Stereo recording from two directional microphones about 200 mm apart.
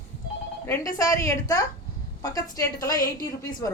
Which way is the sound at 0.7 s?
15° left (ahead or behind).